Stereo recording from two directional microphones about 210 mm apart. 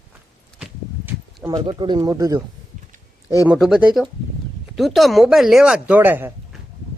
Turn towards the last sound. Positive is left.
turn(degrees=-10)  # may be behind; listen again after turning